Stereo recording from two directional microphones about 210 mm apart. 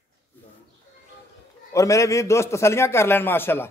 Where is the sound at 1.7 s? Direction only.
15° left (ahead or behind).